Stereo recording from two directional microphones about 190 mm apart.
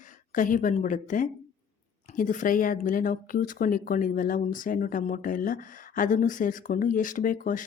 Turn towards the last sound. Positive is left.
turn(degrees=45)  # may be behind; listen again after turning